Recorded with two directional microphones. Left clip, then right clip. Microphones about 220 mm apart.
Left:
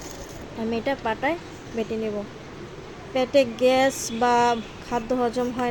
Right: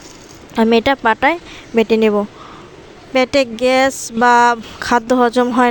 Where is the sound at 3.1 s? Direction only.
45° right (ahead or behind).